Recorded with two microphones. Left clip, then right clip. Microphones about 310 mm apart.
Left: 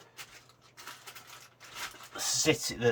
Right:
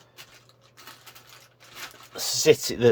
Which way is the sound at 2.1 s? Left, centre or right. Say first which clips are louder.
Right 9 dB; right.